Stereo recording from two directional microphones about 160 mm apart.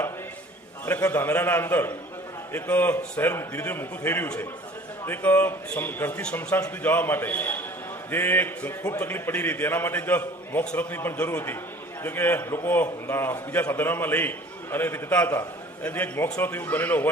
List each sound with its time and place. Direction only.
0.9 s a man's voice: 15° left (ahead or behind)